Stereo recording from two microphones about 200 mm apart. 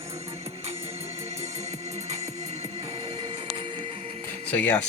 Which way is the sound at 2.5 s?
35° right (ahead or behind).